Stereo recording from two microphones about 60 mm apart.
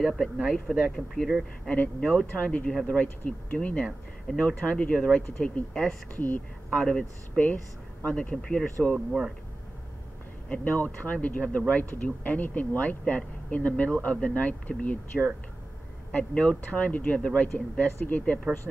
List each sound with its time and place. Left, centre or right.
0.0 s speech: centre
1.7 s speech: left
6.1 s speech: left
10.5 s speech: left